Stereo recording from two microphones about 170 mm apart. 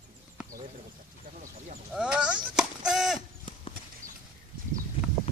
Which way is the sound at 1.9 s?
5° right (ahead or behind).